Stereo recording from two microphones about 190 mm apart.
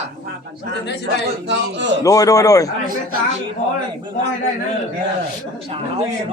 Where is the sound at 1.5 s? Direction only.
70° right (ahead or behind).